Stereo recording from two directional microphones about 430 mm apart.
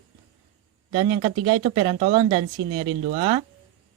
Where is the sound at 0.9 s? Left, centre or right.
Centre.